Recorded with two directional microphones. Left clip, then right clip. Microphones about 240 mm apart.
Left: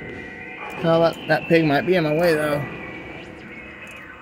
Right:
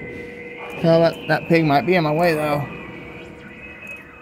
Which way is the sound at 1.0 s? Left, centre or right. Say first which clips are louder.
Right 1 dB; right.